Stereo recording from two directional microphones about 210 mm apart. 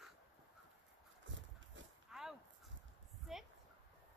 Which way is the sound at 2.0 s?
Centre (ahead or behind).